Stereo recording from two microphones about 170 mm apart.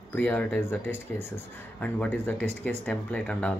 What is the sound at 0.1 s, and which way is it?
Speech, 10° left (ahead or behind).